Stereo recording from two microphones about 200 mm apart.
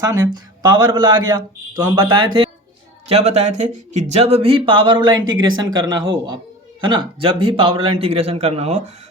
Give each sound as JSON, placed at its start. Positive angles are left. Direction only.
{"t": 0.0, "sound": "speech", "side_deg": -15}
{"t": 3.1, "sound": "speech", "side_deg": -35}